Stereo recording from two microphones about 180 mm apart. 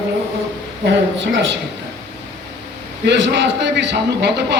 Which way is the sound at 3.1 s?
75° right (ahead or behind).